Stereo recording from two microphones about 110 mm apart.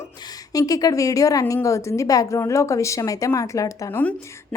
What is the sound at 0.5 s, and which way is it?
A woman's voice, 35° left (ahead or behind).